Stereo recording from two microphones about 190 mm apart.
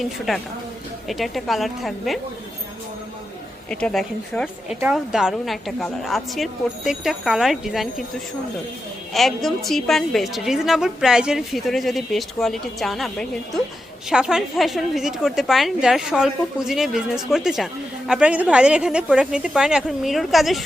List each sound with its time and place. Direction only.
0.3 s a woman's voice: centre (ahead or behind)
3.7 s a woman's voice: 5° left (ahead or behind)
9.1 s a woman's voice: centre (ahead or behind)